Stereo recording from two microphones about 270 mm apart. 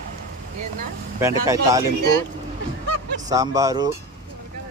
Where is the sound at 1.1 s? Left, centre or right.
Centre.